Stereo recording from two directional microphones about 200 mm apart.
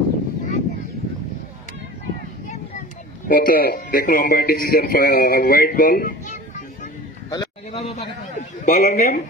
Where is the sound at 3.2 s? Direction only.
45° left (ahead or behind).